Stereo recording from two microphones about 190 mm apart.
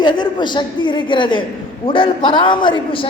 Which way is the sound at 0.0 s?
25° left (ahead or behind).